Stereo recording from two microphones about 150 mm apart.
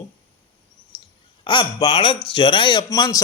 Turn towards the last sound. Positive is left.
turn(degrees=20)  # may be behind; listen again after turning